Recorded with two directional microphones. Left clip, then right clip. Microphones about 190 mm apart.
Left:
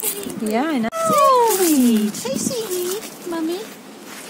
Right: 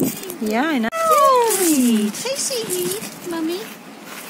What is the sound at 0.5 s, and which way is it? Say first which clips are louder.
Speech: right 1 dB; 5° left (ahead or behind).